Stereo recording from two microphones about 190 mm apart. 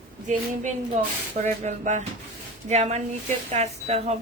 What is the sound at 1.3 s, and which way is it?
Speech, 40° right (ahead or behind).